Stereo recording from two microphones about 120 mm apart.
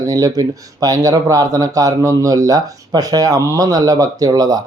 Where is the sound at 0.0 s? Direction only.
30° right (ahead or behind).